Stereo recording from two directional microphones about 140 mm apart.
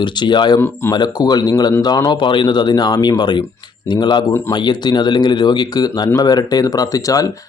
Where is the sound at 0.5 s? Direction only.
15° left (ahead or behind).